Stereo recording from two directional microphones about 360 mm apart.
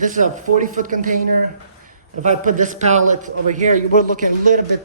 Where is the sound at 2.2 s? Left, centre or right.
Right.